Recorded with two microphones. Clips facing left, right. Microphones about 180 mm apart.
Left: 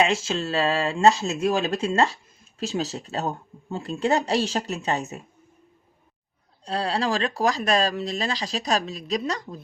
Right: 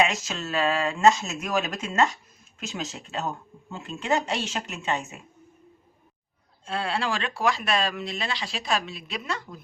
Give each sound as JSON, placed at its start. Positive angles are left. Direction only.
{"t": 0.0, "sound": "speech", "side_deg": 30}
{"t": 6.7, "sound": "speech", "side_deg": 35}